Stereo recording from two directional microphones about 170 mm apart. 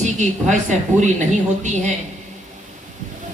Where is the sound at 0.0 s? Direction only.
45° right (ahead or behind).